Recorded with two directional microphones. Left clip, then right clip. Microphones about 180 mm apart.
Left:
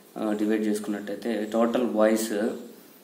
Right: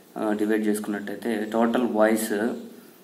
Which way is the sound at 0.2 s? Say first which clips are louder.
Right 2 dB; 10° left (ahead or behind).